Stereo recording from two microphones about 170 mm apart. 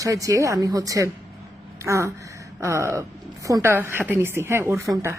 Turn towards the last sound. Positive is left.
turn(degrees=-15)  # may be behind; listen again after turning